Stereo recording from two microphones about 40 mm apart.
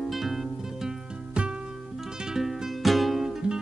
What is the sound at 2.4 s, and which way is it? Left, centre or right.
Music, centre.